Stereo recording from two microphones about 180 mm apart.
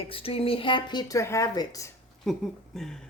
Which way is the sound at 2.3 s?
Centre (ahead or behind).